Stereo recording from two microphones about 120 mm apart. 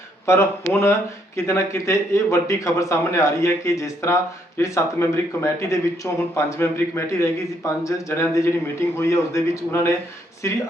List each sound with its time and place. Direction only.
0.3 s a man's voice: 20° left (ahead or behind)